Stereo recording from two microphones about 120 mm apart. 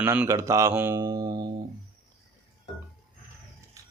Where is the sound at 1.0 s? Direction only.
30° right (ahead or behind).